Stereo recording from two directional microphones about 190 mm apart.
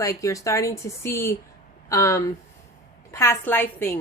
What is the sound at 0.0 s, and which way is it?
A woman's voice, 15° left (ahead or behind).